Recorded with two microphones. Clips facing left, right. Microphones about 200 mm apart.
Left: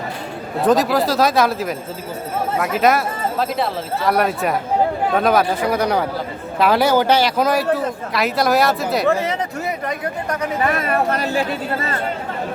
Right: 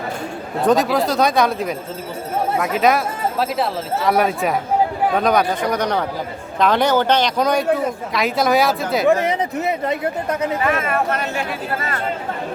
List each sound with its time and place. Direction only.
0.6 s speech: centre (ahead or behind)
9.2 s speech: 20° right (ahead or behind)
10.6 s speech: 35° left (ahead or behind)